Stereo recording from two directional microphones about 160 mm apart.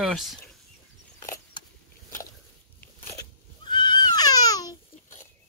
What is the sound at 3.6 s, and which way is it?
Neigh, 25° left (ahead or behind).